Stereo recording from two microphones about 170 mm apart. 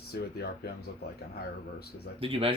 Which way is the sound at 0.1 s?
70° left (ahead or behind).